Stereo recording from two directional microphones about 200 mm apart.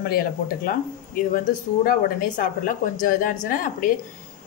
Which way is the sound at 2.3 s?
40° left (ahead or behind).